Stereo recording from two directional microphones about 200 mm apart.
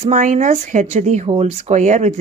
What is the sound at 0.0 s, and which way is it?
Speech, 40° right (ahead or behind).